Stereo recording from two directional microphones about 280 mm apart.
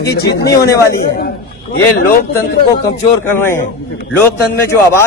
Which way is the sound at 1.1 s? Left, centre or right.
Left.